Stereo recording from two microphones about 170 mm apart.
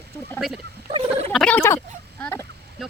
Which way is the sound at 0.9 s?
30° right (ahead or behind).